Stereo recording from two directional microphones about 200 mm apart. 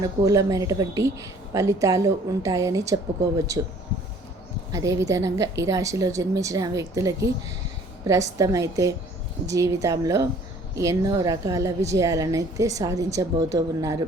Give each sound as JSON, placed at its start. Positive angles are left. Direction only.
{"t": 0.2, "sound": "a woman's voice", "side_deg": -15}
{"t": 4.7, "sound": "a woman's voice", "side_deg": -15}